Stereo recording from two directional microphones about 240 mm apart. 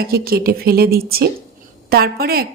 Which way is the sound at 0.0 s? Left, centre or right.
Right.